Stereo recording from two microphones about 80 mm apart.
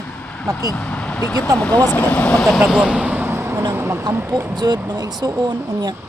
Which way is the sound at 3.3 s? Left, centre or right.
Right.